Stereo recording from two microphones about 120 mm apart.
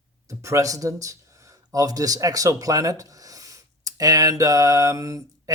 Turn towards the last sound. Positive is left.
turn(degrees=-25)  # may be behind; listen again after turning